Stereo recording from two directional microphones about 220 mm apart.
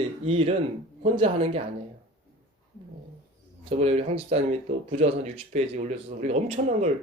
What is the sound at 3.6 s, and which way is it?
Speech, 30° right (ahead or behind).